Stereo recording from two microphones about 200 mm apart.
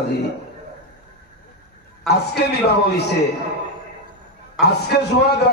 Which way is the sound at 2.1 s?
55° left (ahead or behind).